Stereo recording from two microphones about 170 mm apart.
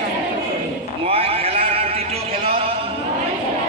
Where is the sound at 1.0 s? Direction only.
35° right (ahead or behind).